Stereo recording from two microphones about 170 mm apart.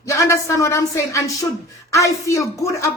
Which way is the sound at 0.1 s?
20° left (ahead or behind).